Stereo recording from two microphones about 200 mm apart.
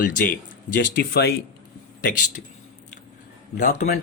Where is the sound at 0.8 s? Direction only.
55° left (ahead or behind).